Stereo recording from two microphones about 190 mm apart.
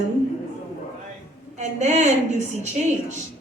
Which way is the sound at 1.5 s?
35° right (ahead or behind).